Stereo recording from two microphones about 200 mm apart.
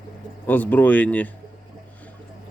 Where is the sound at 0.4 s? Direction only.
10° left (ahead or behind).